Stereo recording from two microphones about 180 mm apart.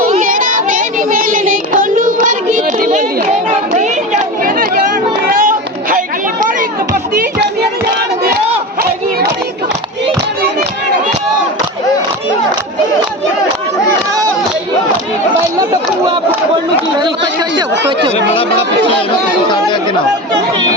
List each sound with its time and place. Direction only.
0.1 s child singing: 50° right (ahead or behind)
3.8 s chatter: 40° right (ahead or behind)
5.3 s a sound: 50° right (ahead or behind)
17.6 s chatter: 25° right (ahead or behind)
18.3 s chatter: 30° left (ahead or behind)